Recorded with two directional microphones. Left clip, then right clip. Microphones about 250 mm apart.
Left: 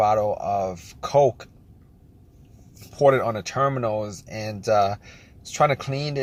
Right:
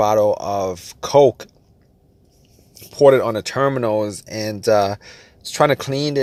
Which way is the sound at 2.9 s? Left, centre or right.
Right.